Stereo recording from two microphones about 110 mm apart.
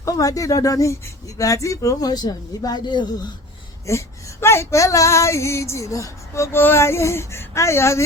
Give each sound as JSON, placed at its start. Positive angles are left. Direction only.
{"t": 0.0, "sound": "speech", "side_deg": 30}
{"t": 3.8, "sound": "female singing", "side_deg": 25}